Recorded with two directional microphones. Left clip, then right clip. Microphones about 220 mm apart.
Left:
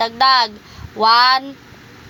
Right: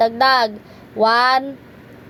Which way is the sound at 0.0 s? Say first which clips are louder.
Left 1 dB; 90° left.